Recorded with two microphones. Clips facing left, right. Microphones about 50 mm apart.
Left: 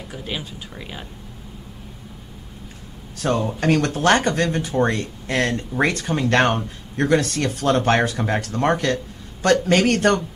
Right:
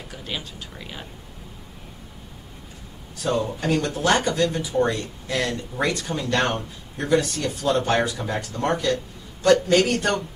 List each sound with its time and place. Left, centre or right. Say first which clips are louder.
0.1 s speech: left 3 dB; centre
3.5 s a man's voice: left 4 dB; left